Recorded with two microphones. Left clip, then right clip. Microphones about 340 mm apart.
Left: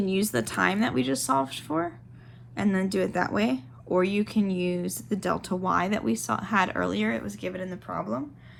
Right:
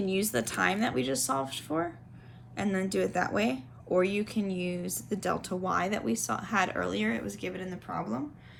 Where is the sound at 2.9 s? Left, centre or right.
Centre.